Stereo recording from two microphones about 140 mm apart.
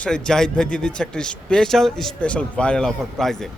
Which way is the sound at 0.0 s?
5° left (ahead or behind).